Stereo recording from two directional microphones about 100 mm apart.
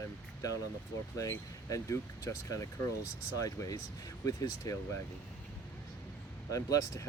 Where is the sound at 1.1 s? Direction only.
30° left (ahead or behind).